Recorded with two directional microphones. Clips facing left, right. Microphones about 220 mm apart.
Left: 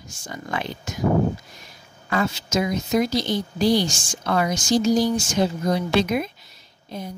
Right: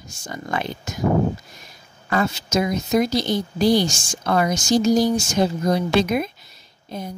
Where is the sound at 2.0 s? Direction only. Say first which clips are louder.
Right 2 dB; 45° right (ahead or behind).